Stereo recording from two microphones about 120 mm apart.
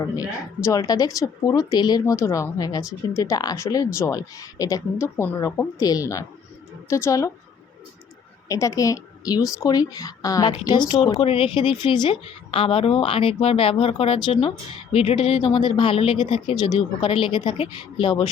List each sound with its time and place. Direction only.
0.0 s speech: 30° left (ahead or behind)
8.4 s speech: 25° left (ahead or behind); by 18.3 s 45° left (ahead or behind)